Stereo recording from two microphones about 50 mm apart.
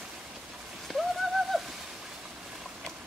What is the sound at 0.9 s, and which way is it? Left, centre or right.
Bird, centre.